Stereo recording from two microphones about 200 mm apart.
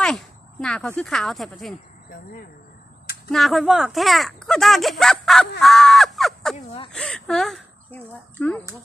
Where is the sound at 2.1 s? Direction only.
45° left (ahead or behind).